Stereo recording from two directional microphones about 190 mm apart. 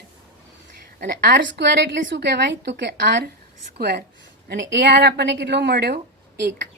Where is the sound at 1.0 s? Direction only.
60° right (ahead or behind).